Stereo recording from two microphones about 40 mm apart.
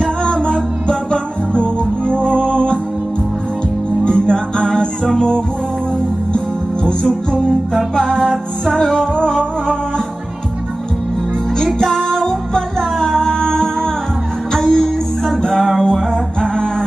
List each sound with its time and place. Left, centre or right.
0.0 s music: centre
4.0 s music: left
6.8 s music: left
11.9 s music: centre